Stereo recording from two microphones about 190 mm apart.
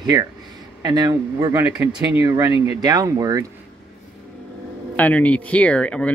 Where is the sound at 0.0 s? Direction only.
20° right (ahead or behind).